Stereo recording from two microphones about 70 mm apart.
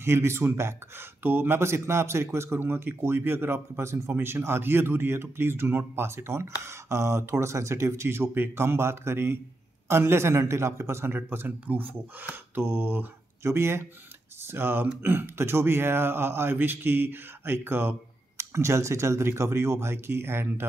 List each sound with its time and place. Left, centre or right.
0.0 s a man's voice: right
18.4 s a man's voice: right